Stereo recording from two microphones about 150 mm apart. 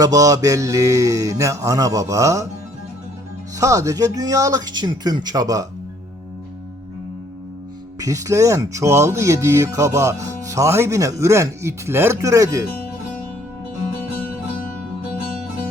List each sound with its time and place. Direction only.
0.0 s speech: 25° right (ahead or behind)
3.6 s speech: 20° right (ahead or behind)
7.9 s speech: 20° right (ahead or behind)